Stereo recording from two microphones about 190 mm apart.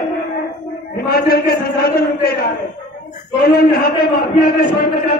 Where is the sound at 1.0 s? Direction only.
55° left (ahead or behind).